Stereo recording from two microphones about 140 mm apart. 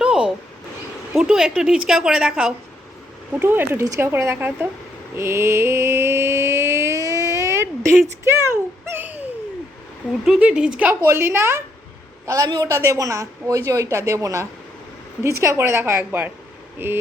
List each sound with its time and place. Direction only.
0.0 s a sound: 5° right (ahead or behind)
1.1 s a woman's voice: 5° right (ahead or behind)
5.1 s mantra: 20° right (ahead or behind)
8.2 s a woman's voice: 20° right (ahead or behind)
8.9 s a sound: 15° right (ahead or behind)
10.2 s a woman's voice: 5° right (ahead or behind)